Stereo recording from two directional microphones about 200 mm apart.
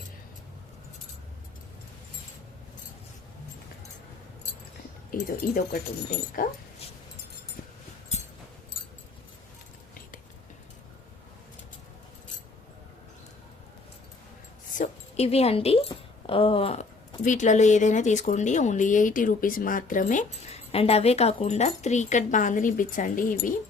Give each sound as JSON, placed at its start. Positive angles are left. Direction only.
{"t": 5.1, "sound": "speech", "side_deg": 50}
{"t": 14.7, "sound": "a sound", "side_deg": 35}
{"t": 17.2, "sound": "speech", "side_deg": 40}